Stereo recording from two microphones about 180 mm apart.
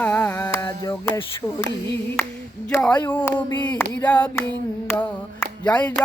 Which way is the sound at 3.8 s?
10° left (ahead or behind).